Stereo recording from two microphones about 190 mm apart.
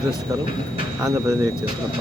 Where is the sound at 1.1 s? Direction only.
15° right (ahead or behind).